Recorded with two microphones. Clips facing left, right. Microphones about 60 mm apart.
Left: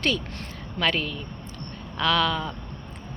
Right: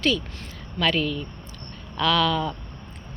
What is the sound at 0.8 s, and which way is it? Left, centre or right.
Speech, left.